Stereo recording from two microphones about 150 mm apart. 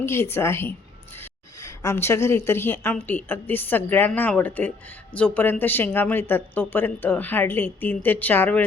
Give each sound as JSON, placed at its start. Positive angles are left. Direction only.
{"t": 0.0, "sound": "a woman's voice", "side_deg": 15}